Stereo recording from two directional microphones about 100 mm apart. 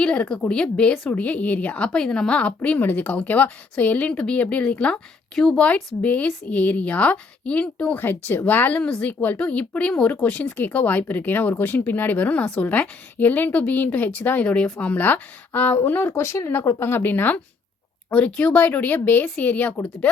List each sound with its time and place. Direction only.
0.0 s a woman's voice: 10° left (ahead or behind)
8.0 s a woman's voice: 20° left (ahead or behind)
16.0 s a woman's voice: 30° left (ahead or behind)